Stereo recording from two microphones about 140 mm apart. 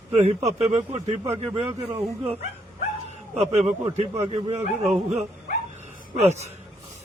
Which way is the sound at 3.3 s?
55° right (ahead or behind).